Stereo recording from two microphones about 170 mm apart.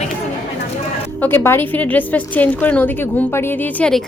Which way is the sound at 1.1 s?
10° left (ahead or behind).